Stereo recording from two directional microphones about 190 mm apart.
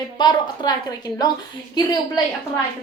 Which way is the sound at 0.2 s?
20° left (ahead or behind).